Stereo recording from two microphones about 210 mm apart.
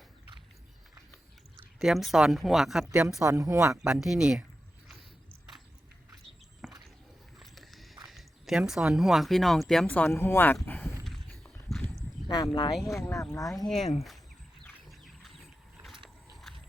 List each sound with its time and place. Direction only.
1.8 s speech: centre (ahead or behind)
3.8 s speech: 5° right (ahead or behind)
6.6 s a sound: centre (ahead or behind)
8.0 s speech: centre (ahead or behind)
10.6 s a sound: 10° left (ahead or behind)
11.0 s horse: centre (ahead or behind)
12.3 s speech: 20° left (ahead or behind)
13.7 s speech: centre (ahead or behind)
14.8 s a sound: centre (ahead or behind)